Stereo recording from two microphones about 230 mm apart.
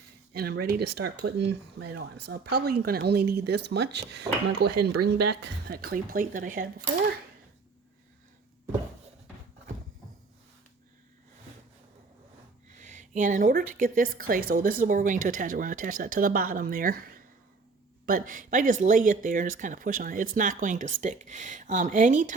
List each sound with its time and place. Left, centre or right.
0.3 s a woman's voice: right
12.7 s a woman's voice: right